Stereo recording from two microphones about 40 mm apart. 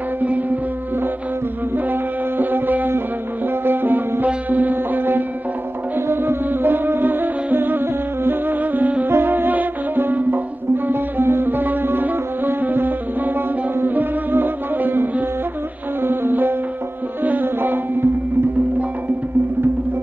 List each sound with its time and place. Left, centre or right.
0.2 s music: right
1.9 s wind instrument: right
3.6 s music: right
5.9 s music: right
9.5 s music: right
10.9 s music: right
12.6 s music: right
17.2 s music: right
17.6 s music: right